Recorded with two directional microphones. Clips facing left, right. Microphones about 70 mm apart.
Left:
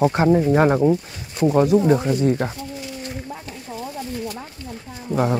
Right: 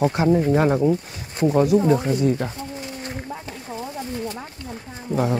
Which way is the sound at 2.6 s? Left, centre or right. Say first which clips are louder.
Even; right.